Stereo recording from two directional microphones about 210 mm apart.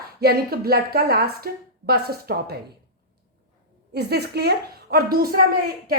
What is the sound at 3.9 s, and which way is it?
A woman's voice, 50° right (ahead or behind).